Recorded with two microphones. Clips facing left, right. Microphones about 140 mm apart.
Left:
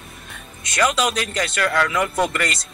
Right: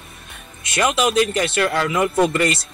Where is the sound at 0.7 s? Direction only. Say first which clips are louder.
Right 2 dB; 25° right (ahead or behind).